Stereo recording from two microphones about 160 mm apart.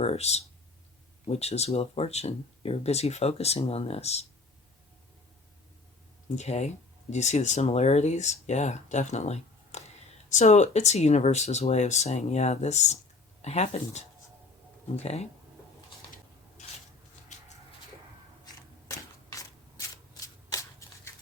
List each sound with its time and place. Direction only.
0.0 s speech: 40° left (ahead or behind)
6.3 s speech: 45° left (ahead or behind)
16.6 s rub: 45° left (ahead or behind)
18.9 s shuffling cards: 20° left (ahead or behind)